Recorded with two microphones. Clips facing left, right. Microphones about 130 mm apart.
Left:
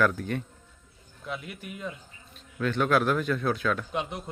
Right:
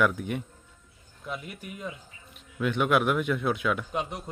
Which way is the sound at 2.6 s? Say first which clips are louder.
Even; 15° right (ahead or behind).